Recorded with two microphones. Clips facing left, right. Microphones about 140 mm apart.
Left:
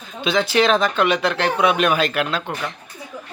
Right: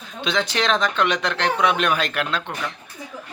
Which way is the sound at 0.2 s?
5° left (ahead or behind).